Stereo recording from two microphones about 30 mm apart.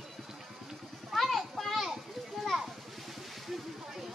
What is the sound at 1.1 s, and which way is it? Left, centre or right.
Children playing, centre.